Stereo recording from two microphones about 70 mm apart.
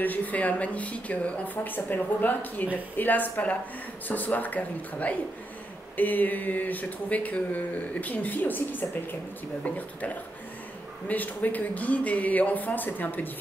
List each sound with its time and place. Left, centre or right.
0.0 s speech: left
11.1 s speech: left